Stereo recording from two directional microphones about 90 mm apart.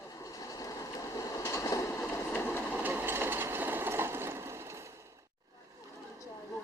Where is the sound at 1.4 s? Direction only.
30° left (ahead or behind).